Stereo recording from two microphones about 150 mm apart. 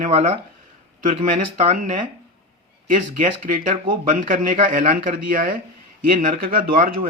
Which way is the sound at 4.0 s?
65° right (ahead or behind).